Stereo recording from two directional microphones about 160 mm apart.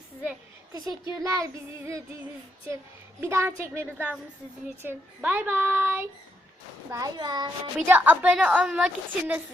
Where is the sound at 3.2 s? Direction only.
15° right (ahead or behind).